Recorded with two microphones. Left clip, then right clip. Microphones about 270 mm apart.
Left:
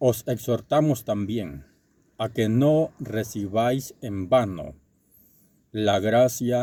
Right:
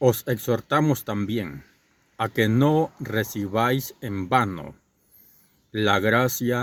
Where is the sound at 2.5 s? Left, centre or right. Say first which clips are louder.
Left 4 dB; right.